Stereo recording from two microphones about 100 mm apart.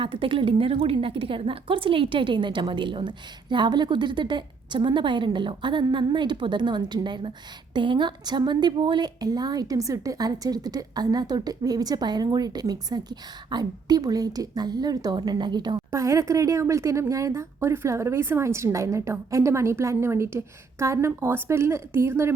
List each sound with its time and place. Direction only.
0.0 s a woman's voice: 60° right (ahead or behind)
15.9 s a woman's voice: 30° right (ahead or behind)